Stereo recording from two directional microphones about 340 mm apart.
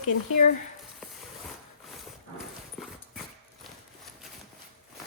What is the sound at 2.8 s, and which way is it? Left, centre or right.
Clip-clop, centre.